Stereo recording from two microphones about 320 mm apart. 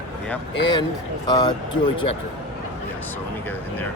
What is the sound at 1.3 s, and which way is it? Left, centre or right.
Speech, centre.